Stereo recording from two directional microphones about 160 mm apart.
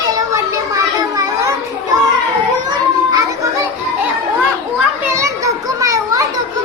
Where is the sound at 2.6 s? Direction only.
25° right (ahead or behind).